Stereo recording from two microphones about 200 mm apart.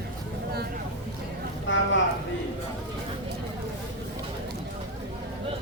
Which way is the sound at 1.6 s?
70° left (ahead or behind).